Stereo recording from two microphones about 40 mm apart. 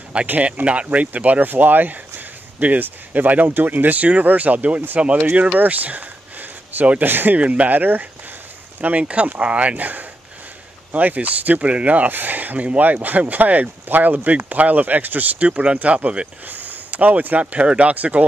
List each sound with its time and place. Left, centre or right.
0.1 s speech: right
0.6 s speech: right
0.9 s speech: right
1.5 s speech: right
7.0 s speech: right
7.3 s speech: right
8.9 s speech: right
9.8 s speech: right
12.1 s speech: right
15.4 s speech: right
16.4 s speech: right